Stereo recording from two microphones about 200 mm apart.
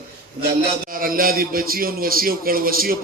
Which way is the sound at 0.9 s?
45° right (ahead or behind).